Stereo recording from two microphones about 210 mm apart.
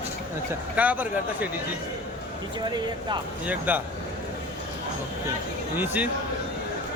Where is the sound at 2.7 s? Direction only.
20° right (ahead or behind).